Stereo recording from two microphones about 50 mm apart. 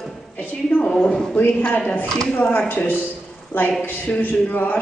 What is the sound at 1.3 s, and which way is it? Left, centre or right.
Speech, left.